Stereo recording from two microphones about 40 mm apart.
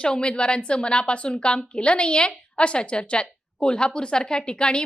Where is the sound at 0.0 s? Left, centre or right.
Left.